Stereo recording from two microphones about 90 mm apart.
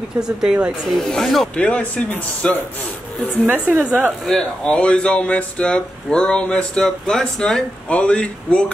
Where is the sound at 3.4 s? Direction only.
20° right (ahead or behind).